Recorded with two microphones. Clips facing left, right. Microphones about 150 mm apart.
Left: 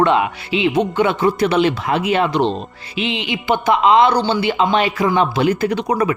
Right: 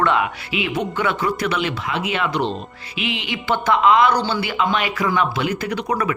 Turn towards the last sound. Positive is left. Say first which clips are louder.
# left 5 dB
turn(degrees=20)  # may be behind; listen again after turning